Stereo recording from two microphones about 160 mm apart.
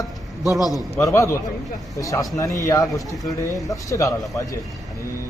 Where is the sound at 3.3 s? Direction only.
20° left (ahead or behind).